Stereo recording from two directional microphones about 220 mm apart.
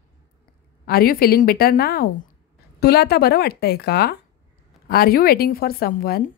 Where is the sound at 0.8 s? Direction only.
45° left (ahead or behind).